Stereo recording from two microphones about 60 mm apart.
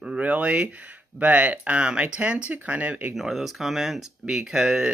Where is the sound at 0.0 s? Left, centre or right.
Right.